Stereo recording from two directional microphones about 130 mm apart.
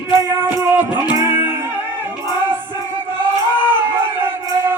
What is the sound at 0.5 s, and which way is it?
Music, 20° right (ahead or behind).